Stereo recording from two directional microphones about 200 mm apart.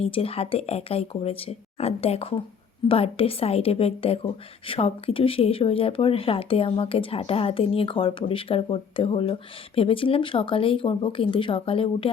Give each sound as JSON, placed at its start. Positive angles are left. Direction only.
{"t": 0.0, "sound": "a woman's voice", "side_deg": 30}